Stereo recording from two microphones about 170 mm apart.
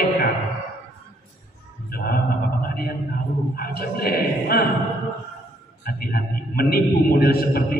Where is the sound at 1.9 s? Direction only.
60° left (ahead or behind).